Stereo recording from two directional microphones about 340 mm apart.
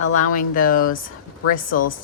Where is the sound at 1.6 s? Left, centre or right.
Left.